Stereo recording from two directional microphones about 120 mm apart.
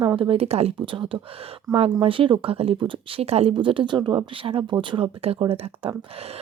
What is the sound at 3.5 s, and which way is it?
Speech, 45° right (ahead or behind).